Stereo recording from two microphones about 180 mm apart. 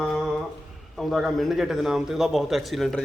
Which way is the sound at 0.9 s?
Centre (ahead or behind).